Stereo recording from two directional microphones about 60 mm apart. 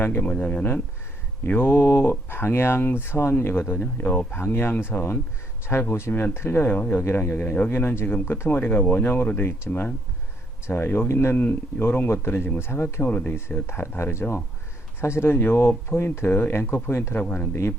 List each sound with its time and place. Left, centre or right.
0.0 s speech: left
0.3 s speech: left
1.5 s speech: left
6.7 s speech: left
8.2 s speech: left
8.4 s speech: left
13.1 s speech: left
13.6 s speech: left
17.2 s speech: left